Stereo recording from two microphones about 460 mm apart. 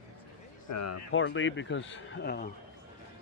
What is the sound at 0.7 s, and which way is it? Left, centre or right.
Speech, left.